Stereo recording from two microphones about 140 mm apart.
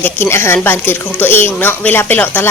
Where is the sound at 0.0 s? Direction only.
15° left (ahead or behind).